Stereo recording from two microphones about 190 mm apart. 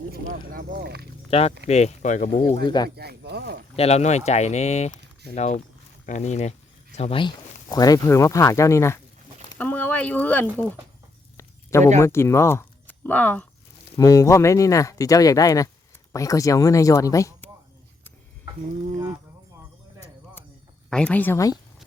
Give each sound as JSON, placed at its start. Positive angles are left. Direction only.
{"t": 0.1, "sound": "speech", "side_deg": -45}
{"t": 0.7, "sound": "speech", "side_deg": -60}
{"t": 1.3, "sound": "speech", "side_deg": 30}
{"t": 2.6, "sound": "speech", "side_deg": 20}
{"t": 2.9, "sound": "speech", "side_deg": -55}
{"t": 3.8, "sound": "speech", "side_deg": 35}
{"t": 11.3, "sound": "a sound", "side_deg": 15}
{"t": 11.9, "sound": "speech", "side_deg": 15}
{"t": 20.9, "sound": "speech", "side_deg": 5}